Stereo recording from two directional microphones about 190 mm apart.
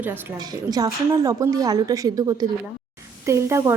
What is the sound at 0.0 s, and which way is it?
A woman's voice, 10° right (ahead or behind).